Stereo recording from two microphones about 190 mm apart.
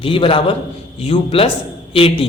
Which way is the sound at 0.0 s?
30° left (ahead or behind).